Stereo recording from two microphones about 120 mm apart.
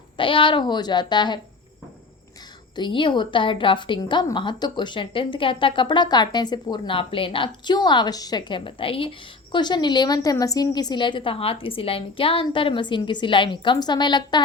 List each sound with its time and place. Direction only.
0.2 s a woman's voice: 45° left (ahead or behind)
2.7 s a woman's voice: 40° left (ahead or behind)
9.5 s a woman's voice: 40° left (ahead or behind)